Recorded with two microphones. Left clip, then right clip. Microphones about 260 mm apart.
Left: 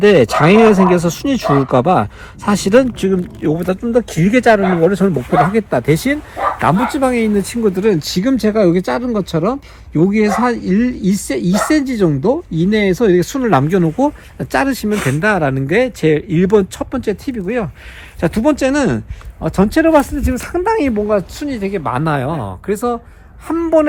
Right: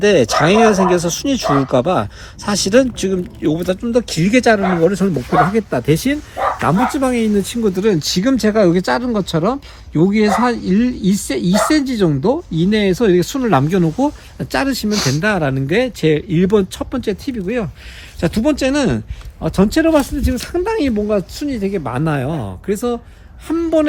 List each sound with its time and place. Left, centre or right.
0.1 s speech: left; by 7.6 s centre
7.8 s speech: centre